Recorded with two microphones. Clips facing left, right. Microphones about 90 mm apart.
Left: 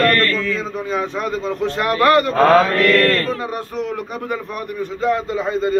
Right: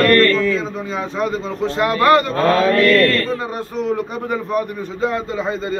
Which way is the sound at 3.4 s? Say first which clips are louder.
Right 1 dB; 30° right (ahead or behind).